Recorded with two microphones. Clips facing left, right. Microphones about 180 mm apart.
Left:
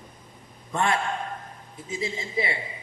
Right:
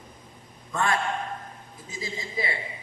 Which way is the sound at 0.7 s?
25° left (ahead or behind).